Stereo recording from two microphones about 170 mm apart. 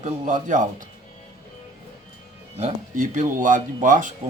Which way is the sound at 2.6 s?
45° right (ahead or behind).